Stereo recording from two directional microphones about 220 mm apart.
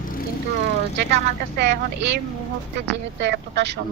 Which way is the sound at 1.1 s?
45° right (ahead or behind).